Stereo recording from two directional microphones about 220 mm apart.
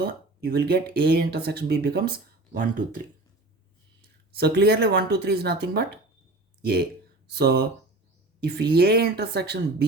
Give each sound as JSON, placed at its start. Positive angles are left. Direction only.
{"t": 0.0, "sound": "speech", "side_deg": -45}
{"t": 4.4, "sound": "speech", "side_deg": -45}